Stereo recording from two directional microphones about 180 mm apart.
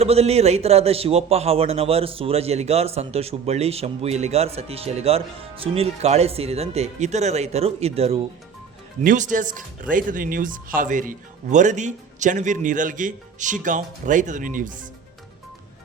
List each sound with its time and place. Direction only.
0.0 s a man's voice: 35° right (ahead or behind)
9.0 s speech: 45° right (ahead or behind)